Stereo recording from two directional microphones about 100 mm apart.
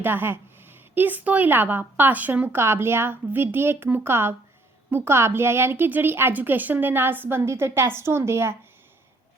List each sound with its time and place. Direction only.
0.0 s a woman's voice: 20° right (ahead or behind)